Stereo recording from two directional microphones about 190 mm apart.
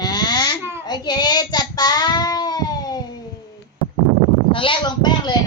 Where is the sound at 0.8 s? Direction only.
20° left (ahead or behind).